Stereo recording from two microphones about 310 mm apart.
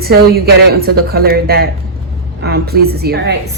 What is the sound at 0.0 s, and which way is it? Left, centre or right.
A woman's voice, right.